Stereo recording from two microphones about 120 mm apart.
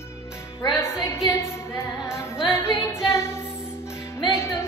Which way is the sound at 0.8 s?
20° left (ahead or behind).